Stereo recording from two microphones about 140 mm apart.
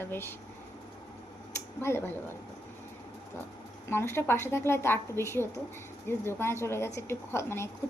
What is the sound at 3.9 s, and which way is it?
A woman's voice, 15° left (ahead or behind).